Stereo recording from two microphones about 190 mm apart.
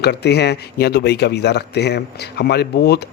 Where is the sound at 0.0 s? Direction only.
60° left (ahead or behind).